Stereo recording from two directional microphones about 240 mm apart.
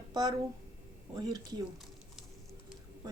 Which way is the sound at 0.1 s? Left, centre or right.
Centre.